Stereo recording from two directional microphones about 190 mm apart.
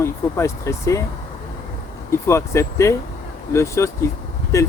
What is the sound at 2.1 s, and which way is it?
Speech, 15° left (ahead or behind).